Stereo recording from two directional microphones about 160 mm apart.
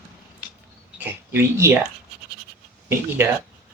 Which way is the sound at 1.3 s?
15° right (ahead or behind).